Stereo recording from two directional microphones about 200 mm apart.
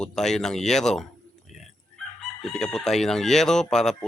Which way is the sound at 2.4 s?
5° left (ahead or behind).